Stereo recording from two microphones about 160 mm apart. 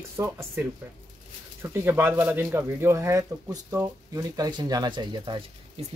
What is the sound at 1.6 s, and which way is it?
Speech, 15° right (ahead or behind).